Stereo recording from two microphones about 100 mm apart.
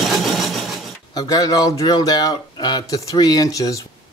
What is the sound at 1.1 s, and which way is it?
Speech, 40° left (ahead or behind).